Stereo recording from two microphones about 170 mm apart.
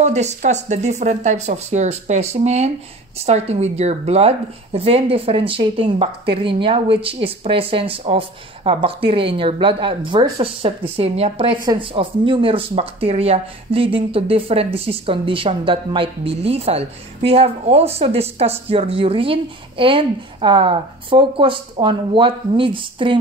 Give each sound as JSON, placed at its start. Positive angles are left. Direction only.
{"t": 0.0, "sound": "speech", "side_deg": -40}